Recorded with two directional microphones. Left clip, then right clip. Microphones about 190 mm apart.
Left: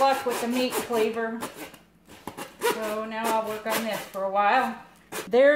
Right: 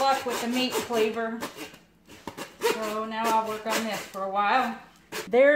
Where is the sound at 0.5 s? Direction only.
10° right (ahead or behind).